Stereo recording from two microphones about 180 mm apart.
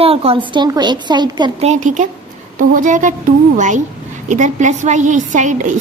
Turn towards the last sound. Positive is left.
turn(degrees=-45)  # may be behind; listen again after turning